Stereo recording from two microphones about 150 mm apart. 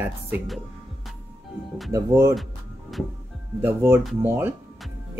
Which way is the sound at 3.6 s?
15° right (ahead or behind).